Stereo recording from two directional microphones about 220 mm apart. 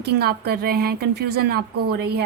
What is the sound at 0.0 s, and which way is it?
A woman's voice, 45° right (ahead or behind).